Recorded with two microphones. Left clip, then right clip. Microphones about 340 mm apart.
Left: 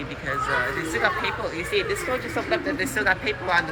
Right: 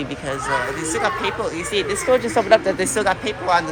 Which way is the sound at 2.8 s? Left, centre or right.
Centre.